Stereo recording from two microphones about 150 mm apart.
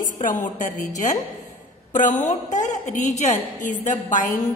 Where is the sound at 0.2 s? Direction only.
60° left (ahead or behind).